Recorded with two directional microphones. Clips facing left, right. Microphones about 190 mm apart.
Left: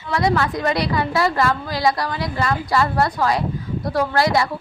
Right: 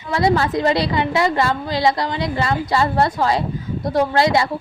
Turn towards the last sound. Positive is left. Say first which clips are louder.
# right 2 dB
turn(degrees=-25)  # may be behind; listen again after turning